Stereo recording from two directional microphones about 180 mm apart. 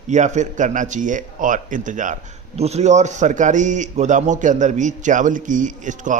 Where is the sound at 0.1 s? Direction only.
40° right (ahead or behind).